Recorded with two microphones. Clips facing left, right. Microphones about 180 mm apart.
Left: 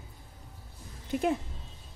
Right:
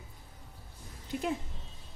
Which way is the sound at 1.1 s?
55° left (ahead or behind).